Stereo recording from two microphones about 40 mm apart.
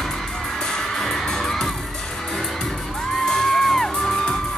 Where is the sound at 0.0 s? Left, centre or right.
Centre.